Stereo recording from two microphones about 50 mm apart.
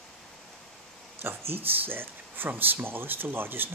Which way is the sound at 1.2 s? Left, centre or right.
Right.